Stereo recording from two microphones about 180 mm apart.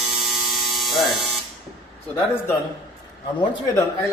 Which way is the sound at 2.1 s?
15° left (ahead or behind).